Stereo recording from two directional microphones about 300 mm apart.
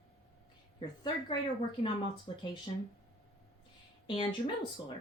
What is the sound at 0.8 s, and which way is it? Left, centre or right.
Speech, centre.